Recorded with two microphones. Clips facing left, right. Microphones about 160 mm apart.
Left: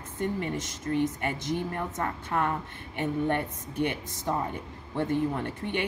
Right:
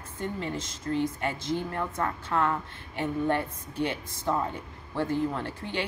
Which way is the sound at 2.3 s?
20° left (ahead or behind).